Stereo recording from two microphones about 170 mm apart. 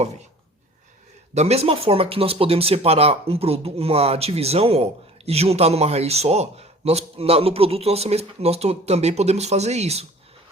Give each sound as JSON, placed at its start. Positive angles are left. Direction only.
{"t": 1.3, "sound": "speech", "side_deg": -40}